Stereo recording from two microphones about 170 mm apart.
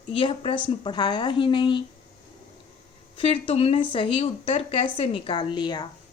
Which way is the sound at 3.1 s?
35° left (ahead or behind).